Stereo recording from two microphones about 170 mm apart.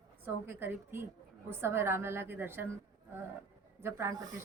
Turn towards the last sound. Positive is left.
turn(degrees=-20)  # may be behind; listen again after turning